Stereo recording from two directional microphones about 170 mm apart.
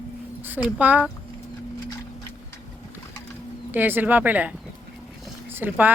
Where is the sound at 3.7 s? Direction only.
10° right (ahead or behind).